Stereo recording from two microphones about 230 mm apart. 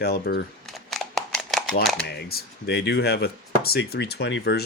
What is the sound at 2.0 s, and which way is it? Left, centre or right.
Speech, left.